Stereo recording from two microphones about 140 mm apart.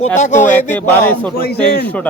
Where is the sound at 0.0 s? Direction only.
55° left (ahead or behind).